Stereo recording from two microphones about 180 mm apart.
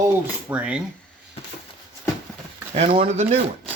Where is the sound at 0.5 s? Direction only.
5° right (ahead or behind).